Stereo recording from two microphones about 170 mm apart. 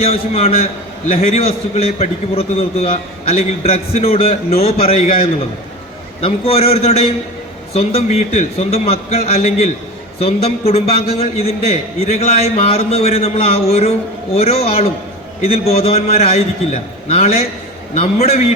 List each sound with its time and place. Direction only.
0.0 s a man's voice: 35° left (ahead or behind)
6.2 s a man's voice: 35° left (ahead or behind)